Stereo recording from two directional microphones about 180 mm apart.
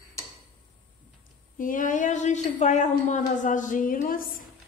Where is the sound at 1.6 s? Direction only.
50° left (ahead or behind).